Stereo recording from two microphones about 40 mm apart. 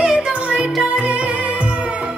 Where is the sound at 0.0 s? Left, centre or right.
Right.